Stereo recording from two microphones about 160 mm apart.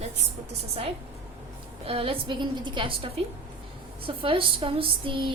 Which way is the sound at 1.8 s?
35° right (ahead or behind).